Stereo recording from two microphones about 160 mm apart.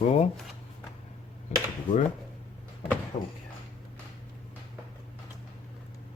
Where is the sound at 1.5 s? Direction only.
45° left (ahead or behind).